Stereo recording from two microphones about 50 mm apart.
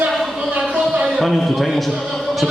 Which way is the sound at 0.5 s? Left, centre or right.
Right.